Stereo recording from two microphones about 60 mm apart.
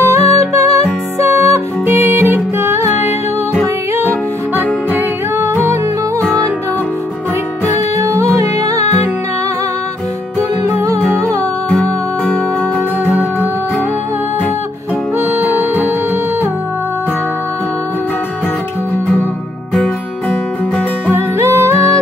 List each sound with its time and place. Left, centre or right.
0.0 s music: right
7.6 s music: right
10.6 s music: right
11.7 s music: left
15.4 s music: right
19.8 s music: centre
21.4 s music: right